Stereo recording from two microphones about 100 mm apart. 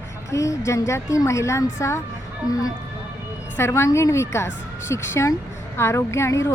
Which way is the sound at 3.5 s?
25° left (ahead or behind).